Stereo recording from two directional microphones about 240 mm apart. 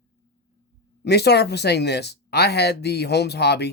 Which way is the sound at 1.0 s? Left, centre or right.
Left.